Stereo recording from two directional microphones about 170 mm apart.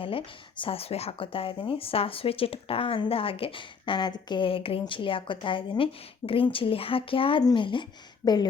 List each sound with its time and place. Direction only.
0.0 s speech: 30° left (ahead or behind)